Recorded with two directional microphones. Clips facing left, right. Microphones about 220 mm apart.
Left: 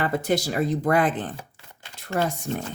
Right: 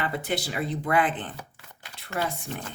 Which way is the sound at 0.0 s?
40° left (ahead or behind).